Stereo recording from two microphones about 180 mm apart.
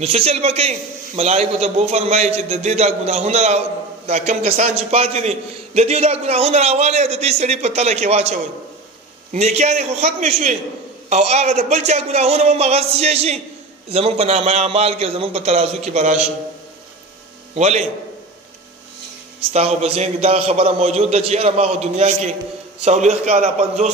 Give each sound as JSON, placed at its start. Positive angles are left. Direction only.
{"t": 0.0, "sound": "a man's voice", "side_deg": -35}
{"t": 17.6, "sound": "a man's voice", "side_deg": -35}
{"t": 19.5, "sound": "a man's voice", "side_deg": -35}